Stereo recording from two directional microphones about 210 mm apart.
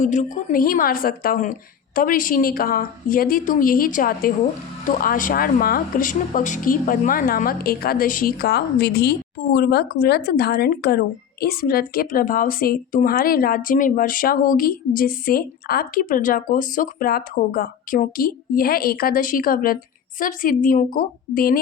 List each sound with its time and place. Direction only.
0.0 s a woman's voice: 35° left (ahead or behind)